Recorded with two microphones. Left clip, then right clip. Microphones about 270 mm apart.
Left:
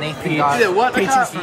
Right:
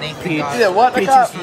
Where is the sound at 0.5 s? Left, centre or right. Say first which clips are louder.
Right 3 dB; right.